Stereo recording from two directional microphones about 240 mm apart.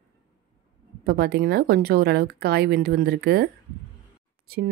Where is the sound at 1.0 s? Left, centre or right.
Right.